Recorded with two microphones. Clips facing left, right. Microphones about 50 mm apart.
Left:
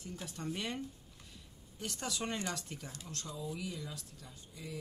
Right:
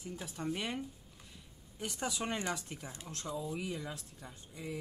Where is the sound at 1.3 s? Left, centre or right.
Centre.